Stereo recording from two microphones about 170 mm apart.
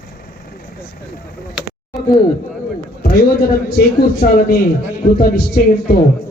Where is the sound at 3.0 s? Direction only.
65° left (ahead or behind).